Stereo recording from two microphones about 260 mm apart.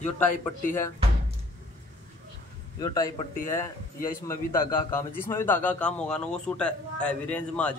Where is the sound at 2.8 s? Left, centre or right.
Centre.